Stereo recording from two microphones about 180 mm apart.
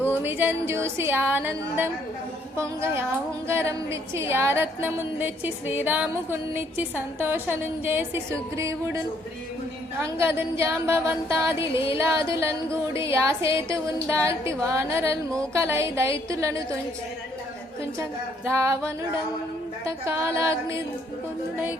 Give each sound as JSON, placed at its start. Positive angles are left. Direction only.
{"t": 0.0, "sound": "a woman's voice", "side_deg": -10}
{"t": 10.0, "sound": "a woman's voice", "side_deg": -15}
{"t": 18.4, "sound": "a woman's voice", "side_deg": -15}
{"t": 19.8, "sound": "a woman's voice", "side_deg": -15}